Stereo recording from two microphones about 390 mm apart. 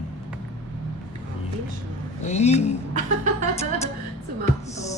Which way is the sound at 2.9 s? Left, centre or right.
Centre.